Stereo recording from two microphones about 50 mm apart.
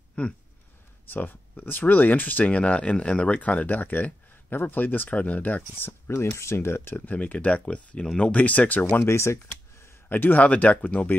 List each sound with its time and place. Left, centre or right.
1.0 s speech: left
7.1 s speech: left
9.0 s speech: left
10.0 s speech: left